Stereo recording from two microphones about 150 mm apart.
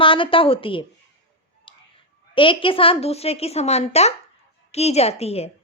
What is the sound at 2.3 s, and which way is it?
Speech, 35° left (ahead or behind).